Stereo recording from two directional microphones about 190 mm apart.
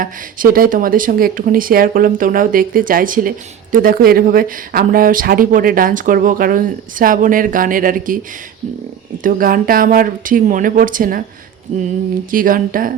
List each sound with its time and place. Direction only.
0.0 s speech: 50° right (ahead or behind)
9.2 s speech: 50° right (ahead or behind)
12.3 s speech: 45° right (ahead or behind)